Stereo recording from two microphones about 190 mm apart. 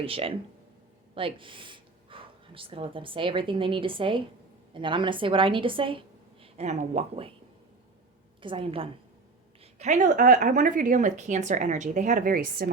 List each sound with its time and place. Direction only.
0.0 s a woman's voice: 30° right (ahead or behind)
8.4 s a woman's voice: 25° right (ahead or behind); by 12.7 s 50° right (ahead or behind)